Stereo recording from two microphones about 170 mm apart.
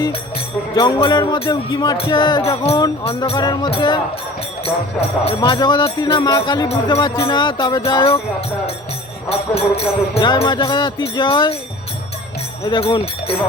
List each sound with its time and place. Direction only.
0.7 s music: 25° left (ahead or behind)
4.6 s jingle bell: 35° left (ahead or behind)
5.4 s music: 25° left (ahead or behind)
9.3 s jingle bell: 35° left (ahead or behind)
10.3 s music: 20° left (ahead or behind)
12.7 s jingle bell: 30° left (ahead or behind)